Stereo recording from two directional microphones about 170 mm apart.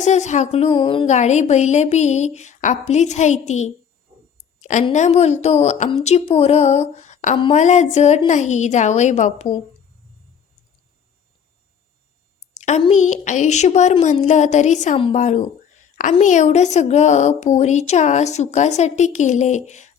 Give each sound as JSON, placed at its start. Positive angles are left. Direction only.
{"t": 0.0, "sound": "speech", "side_deg": 45}
{"t": 1.0, "sound": "a woman's voice", "side_deg": 45}
{"t": 12.5, "sound": "a woman's voice", "side_deg": 40}